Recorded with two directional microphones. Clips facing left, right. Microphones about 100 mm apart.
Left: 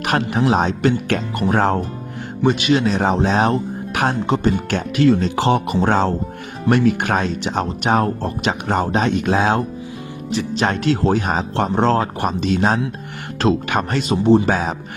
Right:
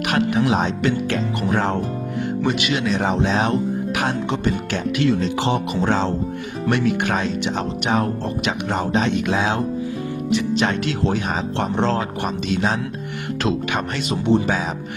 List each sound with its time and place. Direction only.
0.0 s speech: 40° left (ahead or behind)
1.0 s speech: 60° left (ahead or behind)
1.5 s speech: 40° left (ahead or behind)